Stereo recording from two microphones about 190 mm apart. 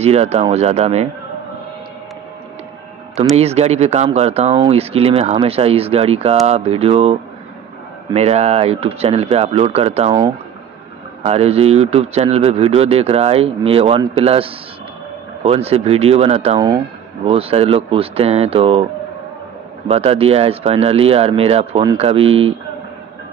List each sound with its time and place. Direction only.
0.0 s speech: 35° right (ahead or behind)
3.3 s speech: 35° right (ahead or behind)
19.9 s speech: 30° right (ahead or behind)